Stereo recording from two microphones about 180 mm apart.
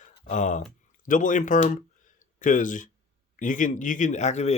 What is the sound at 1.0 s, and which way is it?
Speech, 45° left (ahead or behind).